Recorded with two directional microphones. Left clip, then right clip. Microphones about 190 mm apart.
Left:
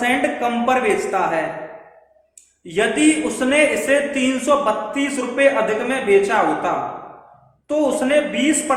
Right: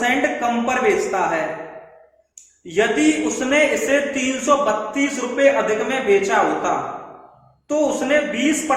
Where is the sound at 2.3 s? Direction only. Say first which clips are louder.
Right 2 dB; 25° left (ahead or behind).